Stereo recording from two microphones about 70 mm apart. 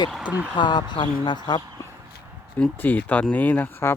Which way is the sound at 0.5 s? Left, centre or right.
Left.